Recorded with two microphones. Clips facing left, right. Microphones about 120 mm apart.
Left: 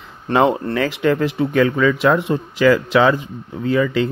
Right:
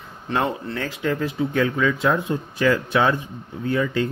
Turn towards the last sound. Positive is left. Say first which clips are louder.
# left 5 dB
turn(degrees=90)